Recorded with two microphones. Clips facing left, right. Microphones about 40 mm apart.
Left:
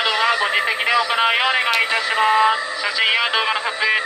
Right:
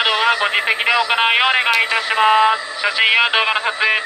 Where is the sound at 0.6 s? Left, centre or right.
Right.